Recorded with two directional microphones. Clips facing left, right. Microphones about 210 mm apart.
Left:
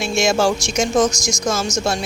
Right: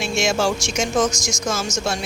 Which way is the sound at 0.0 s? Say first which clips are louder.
Left 3 dB; 40° left (ahead or behind).